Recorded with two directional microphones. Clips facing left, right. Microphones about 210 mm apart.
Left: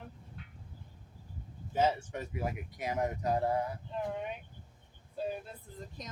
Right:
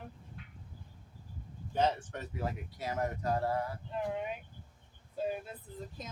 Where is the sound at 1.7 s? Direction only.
5° left (ahead or behind).